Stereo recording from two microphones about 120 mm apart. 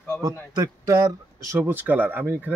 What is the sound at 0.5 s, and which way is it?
Speech, 30° right (ahead or behind).